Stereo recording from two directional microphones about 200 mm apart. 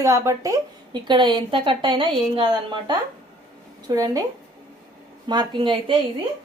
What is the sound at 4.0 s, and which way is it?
Speech, 20° right (ahead or behind).